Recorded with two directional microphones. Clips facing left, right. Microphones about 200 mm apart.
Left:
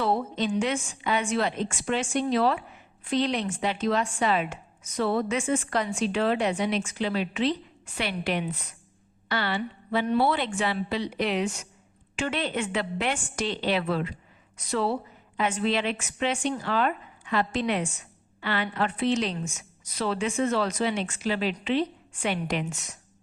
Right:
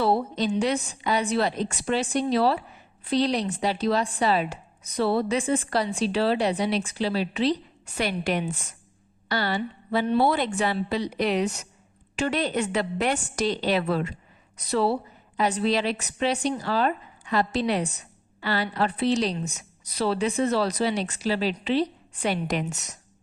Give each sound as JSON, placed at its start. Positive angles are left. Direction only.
{"t": 0.0, "sound": "speech", "side_deg": -35}